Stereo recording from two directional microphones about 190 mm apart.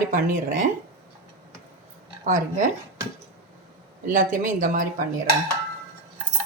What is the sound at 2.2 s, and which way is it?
Speech, 45° right (ahead or behind).